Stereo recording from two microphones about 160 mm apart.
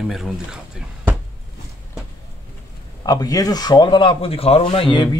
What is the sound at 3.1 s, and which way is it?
Speech, 25° left (ahead or behind).